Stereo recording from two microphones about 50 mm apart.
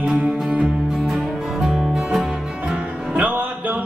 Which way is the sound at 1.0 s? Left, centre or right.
Centre.